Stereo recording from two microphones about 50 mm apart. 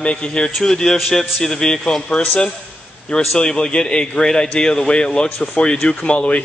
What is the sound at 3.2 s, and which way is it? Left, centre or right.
A man's voice, centre.